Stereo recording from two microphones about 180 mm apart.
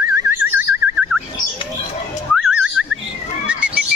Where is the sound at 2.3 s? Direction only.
5° right (ahead or behind).